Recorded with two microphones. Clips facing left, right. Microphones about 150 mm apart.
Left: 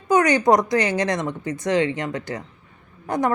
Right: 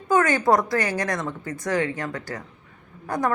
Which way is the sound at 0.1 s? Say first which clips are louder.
Left 3 dB; 20° left (ahead or behind).